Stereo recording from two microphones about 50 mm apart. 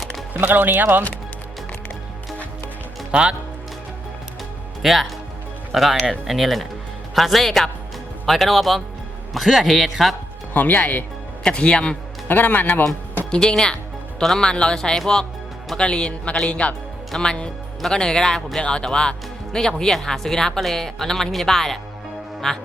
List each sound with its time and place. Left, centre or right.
0.3 s a man's voice: right
3.1 s speech: right
4.8 s speech: centre
10.5 s speech: left
11.4 s a man's voice: left
12.3 s speech: left
13.3 s a man's voice: centre